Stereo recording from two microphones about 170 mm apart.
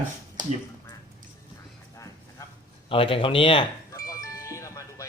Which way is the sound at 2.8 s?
30° left (ahead or behind).